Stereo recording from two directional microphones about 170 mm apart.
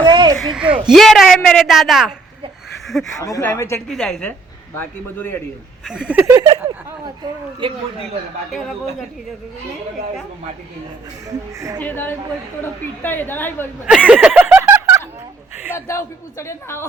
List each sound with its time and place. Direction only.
0.0 s a sound: 25° right (ahead or behind)
0.3 s a man's voice: centre (ahead or behind)
2.8 s a sound: centre (ahead or behind)
3.2 s a man's voice: 20° left (ahead or behind)
3.8 s a man's voice: centre (ahead or behind)
5.8 s speech: 5° right (ahead or behind)
6.3 s speech: 25° right (ahead or behind)
7.6 s speech: 30° right (ahead or behind)
11.3 s speech: 20° right (ahead or behind)
11.8 s a man's voice: 10° left (ahead or behind)
13.9 s snicker: 5° right (ahead or behind)
15.9 s a man's voice: 15° left (ahead or behind)